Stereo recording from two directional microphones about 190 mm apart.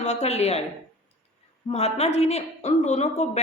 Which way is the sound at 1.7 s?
35° left (ahead or behind).